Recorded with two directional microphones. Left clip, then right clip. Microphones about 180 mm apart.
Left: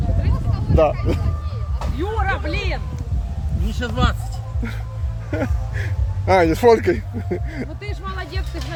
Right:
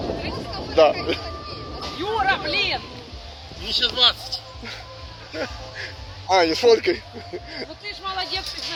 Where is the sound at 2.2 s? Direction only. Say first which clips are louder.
Right 5 dB; 50° right (ahead or behind).